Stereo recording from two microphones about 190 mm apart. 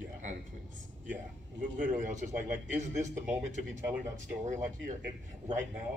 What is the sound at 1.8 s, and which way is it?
A man's voice, 45° right (ahead or behind).